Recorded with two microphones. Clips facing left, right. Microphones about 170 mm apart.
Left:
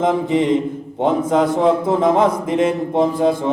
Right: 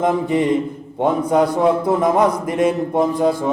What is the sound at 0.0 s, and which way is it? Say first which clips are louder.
A man's voice: left 1 dB; 20° left (ahead or behind).